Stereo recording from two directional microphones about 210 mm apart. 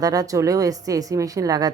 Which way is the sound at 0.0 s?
15° right (ahead or behind).